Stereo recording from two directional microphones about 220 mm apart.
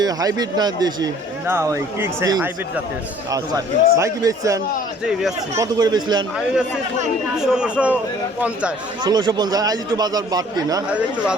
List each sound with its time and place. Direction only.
0.0 s a man's voice: 15° right (ahead or behind)
6.3 s speech: 5° right (ahead or behind)
9.0 s speech: 20° right (ahead or behind)
10.8 s speech: 5° right (ahead or behind)